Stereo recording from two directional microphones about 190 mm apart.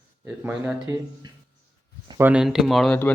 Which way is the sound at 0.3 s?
5° right (ahead or behind).